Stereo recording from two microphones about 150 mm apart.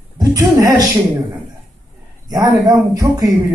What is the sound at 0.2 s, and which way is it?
Speech, 25° right (ahead or behind).